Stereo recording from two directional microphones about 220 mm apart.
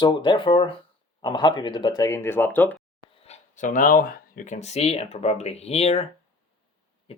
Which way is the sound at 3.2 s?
30° left (ahead or behind).